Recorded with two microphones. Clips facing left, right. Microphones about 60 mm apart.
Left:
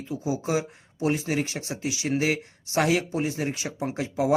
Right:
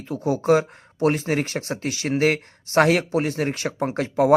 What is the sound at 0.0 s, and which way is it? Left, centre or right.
Speech, right.